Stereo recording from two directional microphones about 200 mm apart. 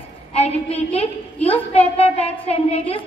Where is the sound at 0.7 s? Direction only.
30° left (ahead or behind).